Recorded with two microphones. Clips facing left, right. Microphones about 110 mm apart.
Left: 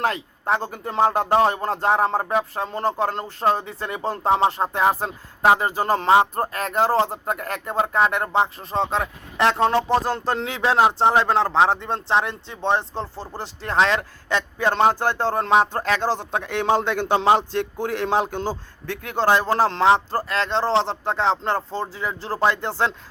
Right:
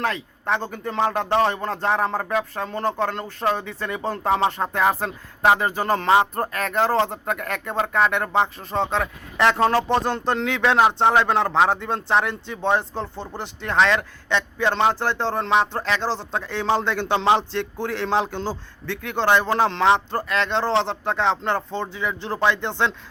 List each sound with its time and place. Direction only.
0.0 s speech: 35° left (ahead or behind)
9.7 s speech: centre (ahead or behind)
10.1 s speech: 40° left (ahead or behind)